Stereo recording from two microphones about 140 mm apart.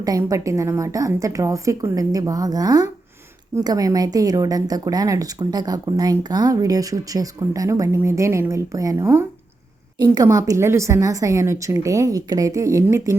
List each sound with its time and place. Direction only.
0.0 s a woman's voice: 25° right (ahead or behind)